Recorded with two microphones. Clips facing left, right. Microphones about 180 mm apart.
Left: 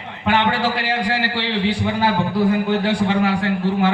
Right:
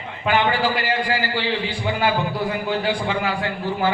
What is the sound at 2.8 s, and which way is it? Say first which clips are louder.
A man's voice: left 4 dB; 75° left (ahead or behind).